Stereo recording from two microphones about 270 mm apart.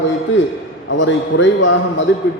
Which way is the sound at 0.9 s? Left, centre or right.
Left.